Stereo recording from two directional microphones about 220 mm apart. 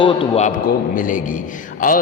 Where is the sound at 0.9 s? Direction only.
40° left (ahead or behind).